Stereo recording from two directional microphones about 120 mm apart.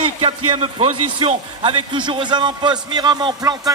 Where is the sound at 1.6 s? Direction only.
40° right (ahead or behind).